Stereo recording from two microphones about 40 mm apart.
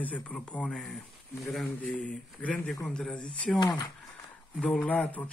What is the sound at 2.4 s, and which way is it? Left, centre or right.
Speech, left.